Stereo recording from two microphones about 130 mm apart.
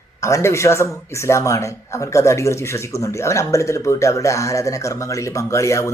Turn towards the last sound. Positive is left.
turn(degrees=20)  # may be behind; listen again after turning